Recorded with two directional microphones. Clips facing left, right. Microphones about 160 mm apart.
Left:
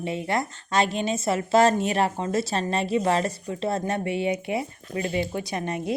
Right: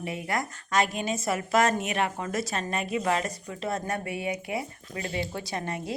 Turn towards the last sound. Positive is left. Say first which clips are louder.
# left 5 dB
turn(degrees=20)  # may be behind; listen again after turning